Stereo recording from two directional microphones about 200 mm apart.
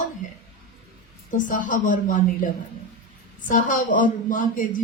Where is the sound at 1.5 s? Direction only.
40° left (ahead or behind).